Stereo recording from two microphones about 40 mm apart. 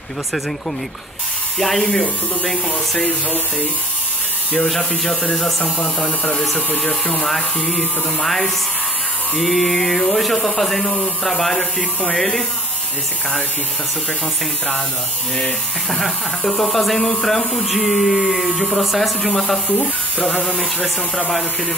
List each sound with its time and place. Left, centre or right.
1.6 s speech: centre
1.9 s speech: centre
4.6 s speech: centre
6.0 s speech: left
7.2 s speech: centre
15.3 s speech: centre